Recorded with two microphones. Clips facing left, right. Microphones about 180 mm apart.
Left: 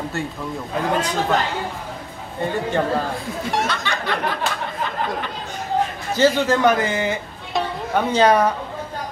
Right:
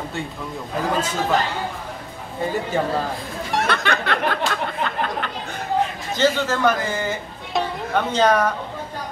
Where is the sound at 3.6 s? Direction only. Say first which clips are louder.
Right 3 dB; 60° right (ahead or behind).